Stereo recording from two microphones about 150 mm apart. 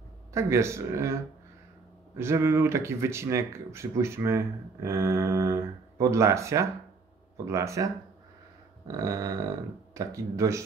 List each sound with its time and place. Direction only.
0.3 s speech: 20° right (ahead or behind)